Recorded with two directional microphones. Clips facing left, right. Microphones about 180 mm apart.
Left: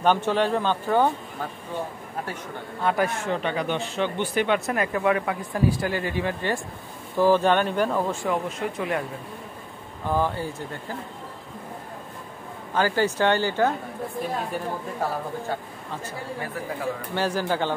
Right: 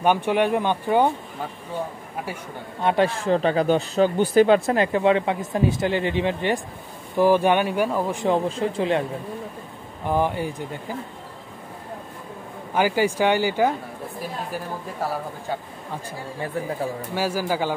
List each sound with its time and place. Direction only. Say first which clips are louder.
0.0 s speech: right 2 dB; 10° right (ahead or behind)
2.8 s speech: right 3 dB; 25° right (ahead or behind)
8.3 s speech: right 5 dB; 30° right (ahead or behind)
10.0 s speech: right 2 dB; 15° right (ahead or behind)
12.7 s speech: right 2 dB; 10° right (ahead or behind)
16.6 s speech: right 5 dB; 25° right (ahead or behind)
17.1 s speech: even; 10° right (ahead or behind)